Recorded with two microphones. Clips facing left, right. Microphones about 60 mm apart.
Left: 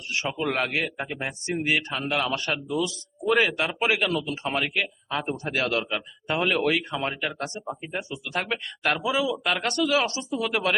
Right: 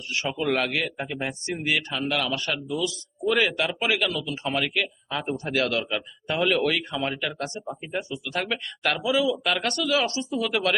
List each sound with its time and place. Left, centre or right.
0.4 s speech: centre
0.7 s speech: left
1.6 s a man's voice: left
4.6 s speech: centre
7.6 s speech: centre